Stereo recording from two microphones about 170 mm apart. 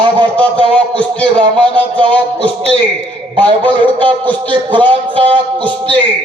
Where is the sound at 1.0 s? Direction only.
5° left (ahead or behind).